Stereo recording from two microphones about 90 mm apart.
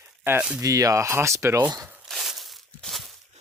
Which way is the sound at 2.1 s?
Centre (ahead or behind).